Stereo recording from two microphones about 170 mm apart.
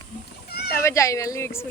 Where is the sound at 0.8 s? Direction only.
15° left (ahead or behind).